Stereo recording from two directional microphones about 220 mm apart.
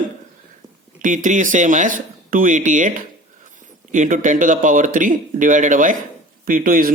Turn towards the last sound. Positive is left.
turn(degrees=-40)  # may be behind; listen again after turning